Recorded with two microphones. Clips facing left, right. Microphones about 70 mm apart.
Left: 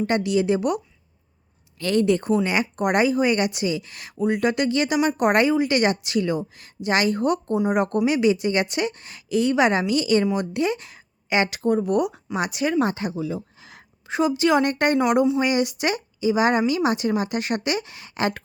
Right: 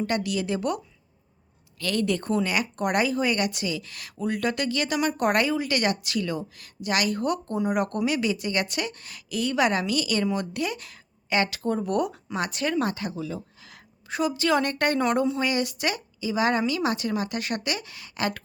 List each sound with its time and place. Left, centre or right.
0.0 s a woman's voice: left
1.8 s a woman's voice: left
11.8 s speech: centre
13.6 s a sound: left
14.9 s a woman's voice: centre